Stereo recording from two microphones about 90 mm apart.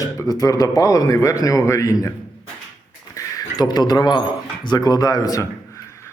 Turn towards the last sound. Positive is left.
turn(degrees=45)  # may be behind; listen again after turning